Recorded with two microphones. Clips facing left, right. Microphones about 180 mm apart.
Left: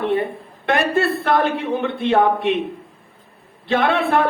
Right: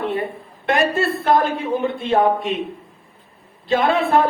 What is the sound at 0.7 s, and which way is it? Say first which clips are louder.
A woman's voice: even; 60° left (ahead or behind).